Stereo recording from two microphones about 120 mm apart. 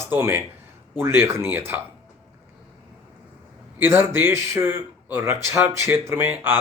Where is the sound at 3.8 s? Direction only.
20° right (ahead or behind).